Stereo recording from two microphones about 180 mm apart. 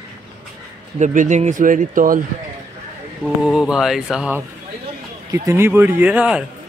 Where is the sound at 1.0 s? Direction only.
40° right (ahead or behind).